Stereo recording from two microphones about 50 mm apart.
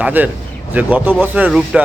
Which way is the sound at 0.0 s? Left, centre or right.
Right.